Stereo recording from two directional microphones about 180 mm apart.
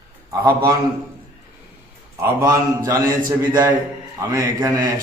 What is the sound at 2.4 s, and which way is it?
A man's voice, 20° right (ahead or behind).